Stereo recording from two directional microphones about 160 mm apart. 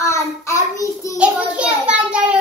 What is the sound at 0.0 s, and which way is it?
Child singing, 20° left (ahead or behind).